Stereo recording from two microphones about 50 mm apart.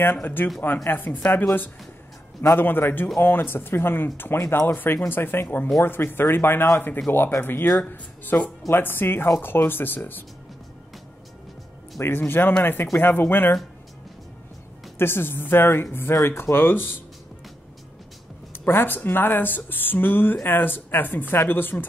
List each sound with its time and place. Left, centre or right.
0.0 s speech: left
12.0 s speech: left
15.0 s speech: left
18.7 s speech: left